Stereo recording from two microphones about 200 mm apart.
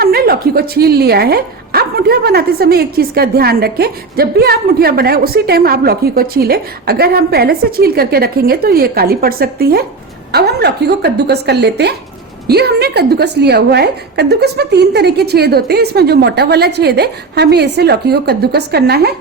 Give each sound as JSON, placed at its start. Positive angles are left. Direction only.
{"t": 0.0, "sound": "a woman's voice", "side_deg": -50}